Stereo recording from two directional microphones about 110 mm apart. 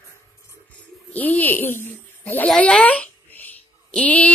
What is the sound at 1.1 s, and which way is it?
A woman's voice, 15° left (ahead or behind).